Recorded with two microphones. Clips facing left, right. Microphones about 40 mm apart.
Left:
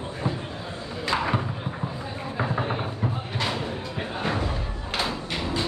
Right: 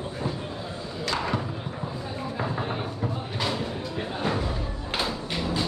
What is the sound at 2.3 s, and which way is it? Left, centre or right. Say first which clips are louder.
Vehicle: left 4 dB; centre.